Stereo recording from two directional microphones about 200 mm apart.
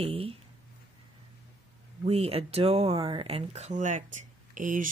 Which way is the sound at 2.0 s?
30° right (ahead or behind).